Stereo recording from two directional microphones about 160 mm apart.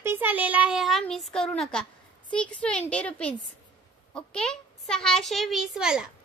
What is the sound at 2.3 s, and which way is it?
A child's voice, 5° left (ahead or behind).